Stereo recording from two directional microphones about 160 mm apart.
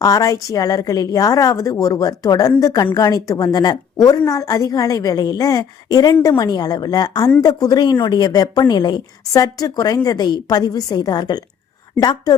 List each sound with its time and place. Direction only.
0.0 s a woman's voice: 20° left (ahead or behind)